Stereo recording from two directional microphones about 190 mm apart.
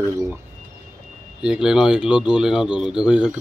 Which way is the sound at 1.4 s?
5° right (ahead or behind).